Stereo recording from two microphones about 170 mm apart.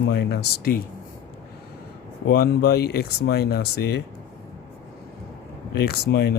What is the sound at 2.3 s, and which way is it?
Speech, 65° left (ahead or behind).